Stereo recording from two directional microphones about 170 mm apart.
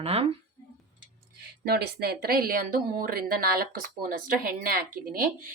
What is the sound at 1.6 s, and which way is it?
Speech, 65° right (ahead or behind).